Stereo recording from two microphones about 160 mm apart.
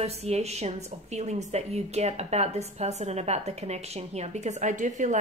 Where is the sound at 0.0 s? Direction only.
40° right (ahead or behind).